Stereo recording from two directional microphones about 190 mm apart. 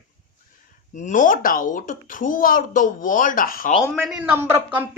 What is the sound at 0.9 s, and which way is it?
Speech, 40° left (ahead or behind).